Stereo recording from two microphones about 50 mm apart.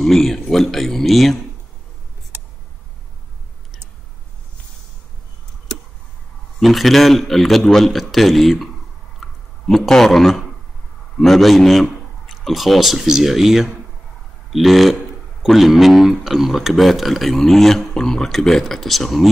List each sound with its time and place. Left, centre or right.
0.0 s speech: centre
2.3 s tick: right
6.6 s speech: centre
9.2 s a sound: centre
11.1 s speech: centre